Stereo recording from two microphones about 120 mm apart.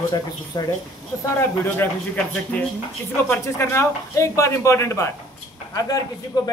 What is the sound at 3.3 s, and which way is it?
Speech, 20° left (ahead or behind).